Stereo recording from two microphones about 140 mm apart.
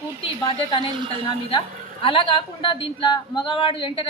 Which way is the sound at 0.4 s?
40° left (ahead or behind).